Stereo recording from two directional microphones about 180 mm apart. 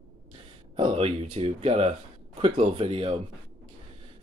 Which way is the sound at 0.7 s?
30° right (ahead or behind).